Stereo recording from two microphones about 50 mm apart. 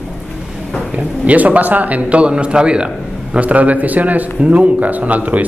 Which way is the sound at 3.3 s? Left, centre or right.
Right.